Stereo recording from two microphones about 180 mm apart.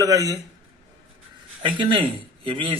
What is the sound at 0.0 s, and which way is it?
Speech, 20° right (ahead or behind).